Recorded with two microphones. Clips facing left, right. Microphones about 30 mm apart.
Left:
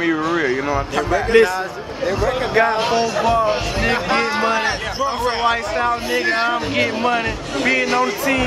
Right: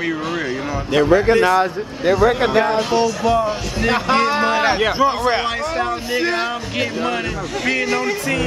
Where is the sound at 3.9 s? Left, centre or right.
Centre.